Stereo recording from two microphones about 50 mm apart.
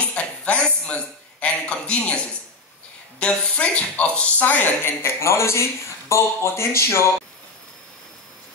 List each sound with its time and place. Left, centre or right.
0.0 s a sound: left
3.2 s a woman's voice: left
5.2 s speech: left